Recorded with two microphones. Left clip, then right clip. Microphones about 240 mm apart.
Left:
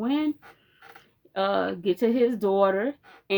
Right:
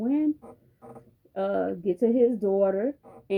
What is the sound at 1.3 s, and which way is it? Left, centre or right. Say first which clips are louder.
Speech: left 2 dB; centre.